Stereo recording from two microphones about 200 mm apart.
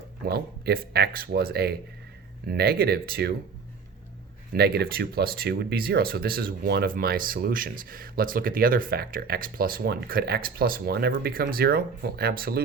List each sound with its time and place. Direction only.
0.3 s speech: 50° right (ahead or behind)
4.5 s speech: 50° right (ahead or behind)